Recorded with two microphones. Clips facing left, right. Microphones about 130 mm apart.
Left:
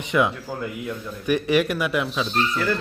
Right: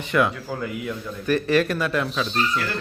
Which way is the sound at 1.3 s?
15° left (ahead or behind).